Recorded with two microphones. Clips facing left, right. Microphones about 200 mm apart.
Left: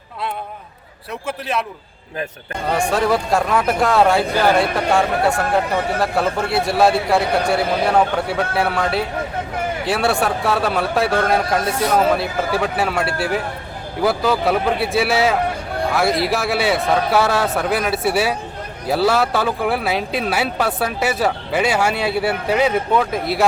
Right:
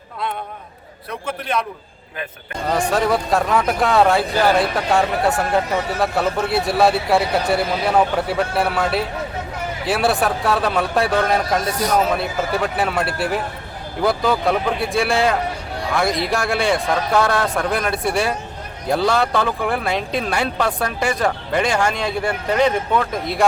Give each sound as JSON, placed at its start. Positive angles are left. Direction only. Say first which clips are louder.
{"t": 1.3, "sound": "speech", "louder": "even", "side_deg": 5}
{"t": 2.6, "sound": "speech", "louder": "left 1 dB", "side_deg": 0}